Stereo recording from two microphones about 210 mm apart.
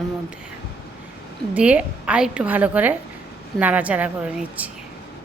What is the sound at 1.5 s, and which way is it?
A woman's voice, 5° right (ahead or behind).